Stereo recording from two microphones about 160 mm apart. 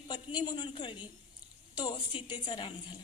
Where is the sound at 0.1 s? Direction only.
25° left (ahead or behind).